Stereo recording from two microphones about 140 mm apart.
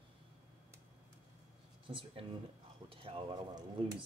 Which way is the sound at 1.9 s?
40° right (ahead or behind).